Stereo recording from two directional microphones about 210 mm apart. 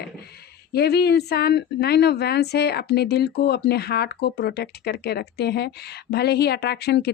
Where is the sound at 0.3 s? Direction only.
50° left (ahead or behind).